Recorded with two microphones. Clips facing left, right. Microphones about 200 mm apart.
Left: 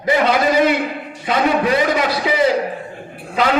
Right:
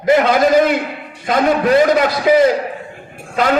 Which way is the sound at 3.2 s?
50° right (ahead or behind).